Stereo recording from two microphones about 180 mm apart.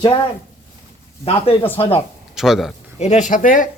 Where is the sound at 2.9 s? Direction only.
40° left (ahead or behind).